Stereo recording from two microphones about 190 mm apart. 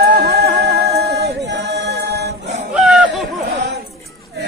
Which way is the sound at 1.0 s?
60° right (ahead or behind).